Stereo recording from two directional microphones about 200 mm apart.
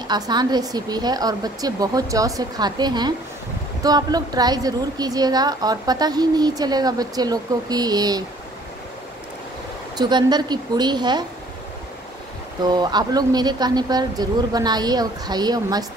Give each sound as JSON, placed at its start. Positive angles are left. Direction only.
{"t": 0.1, "sound": "a woman's voice", "side_deg": -20}
{"t": 9.9, "sound": "a woman's voice", "side_deg": -20}
{"t": 12.6, "sound": "a woman's voice", "side_deg": -20}